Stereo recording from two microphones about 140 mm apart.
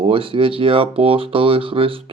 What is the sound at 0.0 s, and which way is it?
Speech, 40° right (ahead or behind).